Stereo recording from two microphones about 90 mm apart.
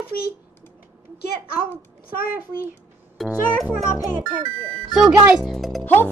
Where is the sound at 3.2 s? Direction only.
Centre (ahead or behind).